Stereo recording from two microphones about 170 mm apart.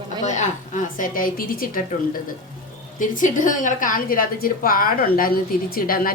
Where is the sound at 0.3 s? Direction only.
45° left (ahead or behind).